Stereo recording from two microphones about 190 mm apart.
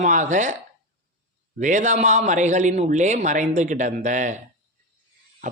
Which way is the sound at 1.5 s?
40° right (ahead or behind).